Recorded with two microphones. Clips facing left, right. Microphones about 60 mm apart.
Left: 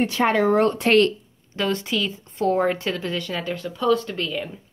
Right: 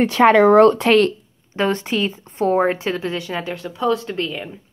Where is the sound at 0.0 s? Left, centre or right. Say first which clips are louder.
Right 7 dB; right.